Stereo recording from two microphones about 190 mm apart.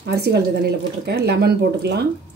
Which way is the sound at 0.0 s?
60° right (ahead or behind).